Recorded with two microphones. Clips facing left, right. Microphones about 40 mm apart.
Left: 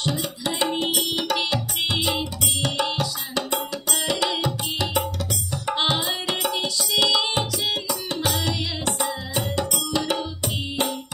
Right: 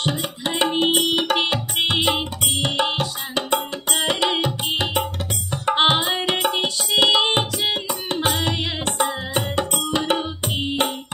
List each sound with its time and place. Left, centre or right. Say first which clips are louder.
0.0 s tabla: right 2 dB; right
5.5 s music: right 6 dB; right